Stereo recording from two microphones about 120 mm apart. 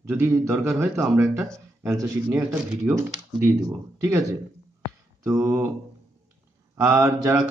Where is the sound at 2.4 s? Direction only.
15° right (ahead or behind).